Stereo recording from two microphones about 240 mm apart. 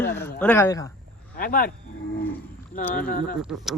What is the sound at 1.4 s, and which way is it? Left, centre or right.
Speech, left.